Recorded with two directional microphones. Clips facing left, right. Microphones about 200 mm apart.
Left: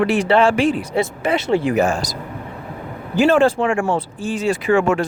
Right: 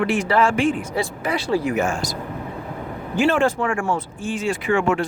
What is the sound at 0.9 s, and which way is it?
Speech, 25° left (ahead or behind).